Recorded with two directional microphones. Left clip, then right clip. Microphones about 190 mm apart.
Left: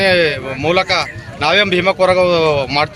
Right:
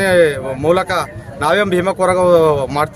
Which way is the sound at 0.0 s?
15° right (ahead or behind).